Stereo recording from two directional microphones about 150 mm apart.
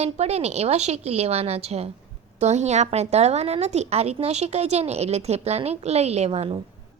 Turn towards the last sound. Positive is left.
turn(degrees=-40)  # may be behind; listen again after turning